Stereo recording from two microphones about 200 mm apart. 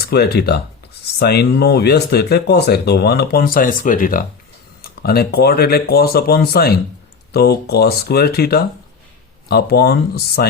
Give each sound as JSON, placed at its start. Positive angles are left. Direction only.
{"t": 0.0, "sound": "speech", "side_deg": 55}